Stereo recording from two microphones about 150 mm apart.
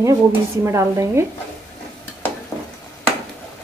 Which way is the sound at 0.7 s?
20° right (ahead or behind).